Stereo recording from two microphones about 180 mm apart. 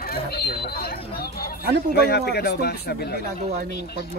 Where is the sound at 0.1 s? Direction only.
60° left (ahead or behind).